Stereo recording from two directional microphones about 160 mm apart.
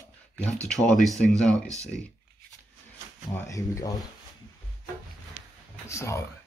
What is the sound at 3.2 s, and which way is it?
Speech, 20° left (ahead or behind).